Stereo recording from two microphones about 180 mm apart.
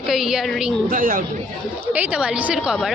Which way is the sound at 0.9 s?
50° right (ahead or behind).